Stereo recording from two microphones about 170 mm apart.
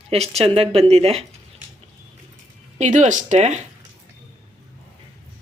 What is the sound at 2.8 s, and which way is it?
Speech, 45° right (ahead or behind).